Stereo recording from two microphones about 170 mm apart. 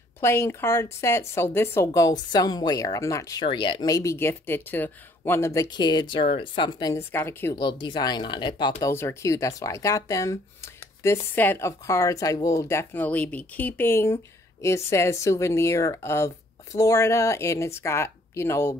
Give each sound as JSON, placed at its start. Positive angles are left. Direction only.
{"t": 0.2, "sound": "speech", "side_deg": 15}
{"t": 7.5, "sound": "speech", "side_deg": 30}